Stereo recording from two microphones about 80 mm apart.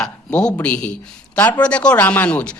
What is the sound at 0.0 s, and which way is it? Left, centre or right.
A man's voice, centre.